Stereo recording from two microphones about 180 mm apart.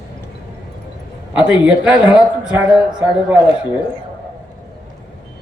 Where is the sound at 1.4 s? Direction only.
5° right (ahead or behind).